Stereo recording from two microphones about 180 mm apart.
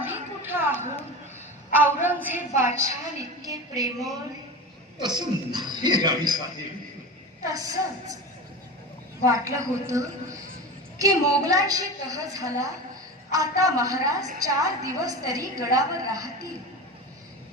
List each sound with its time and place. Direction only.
0.0 s a sound: 10° right (ahead or behind)
2.2 s a woman's voice: 10° right (ahead or behind)
7.4 s a woman's voice: 20° right (ahead or behind)
9.2 s a woman's voice: 15° right (ahead or behind)